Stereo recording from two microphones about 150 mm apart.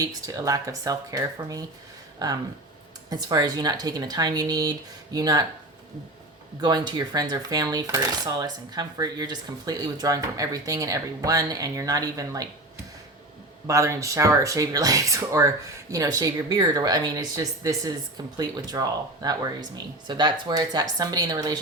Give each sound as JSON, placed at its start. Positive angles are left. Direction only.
{"t": 0.0, "sound": "speech", "side_deg": -25}
{"t": 6.6, "sound": "speech", "side_deg": -30}
{"t": 13.7, "sound": "speech", "side_deg": -20}